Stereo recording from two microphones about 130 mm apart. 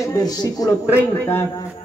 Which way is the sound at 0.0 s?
25° left (ahead or behind).